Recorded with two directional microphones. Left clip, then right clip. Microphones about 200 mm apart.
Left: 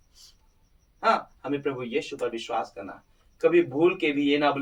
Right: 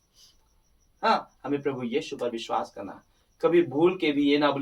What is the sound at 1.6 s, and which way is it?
Speech, centre (ahead or behind).